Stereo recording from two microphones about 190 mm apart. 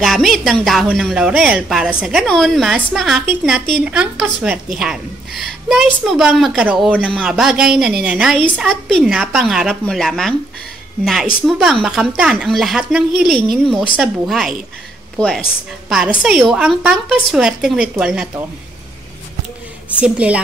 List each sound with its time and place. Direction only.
0.0 s a woman's voice: centre (ahead or behind)
11.4 s a woman's voice: centre (ahead or behind)
20.0 s a woman's voice: 5° right (ahead or behind)